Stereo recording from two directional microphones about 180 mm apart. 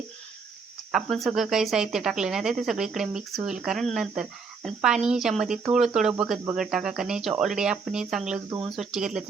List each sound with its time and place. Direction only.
0.9 s speech: centre (ahead or behind)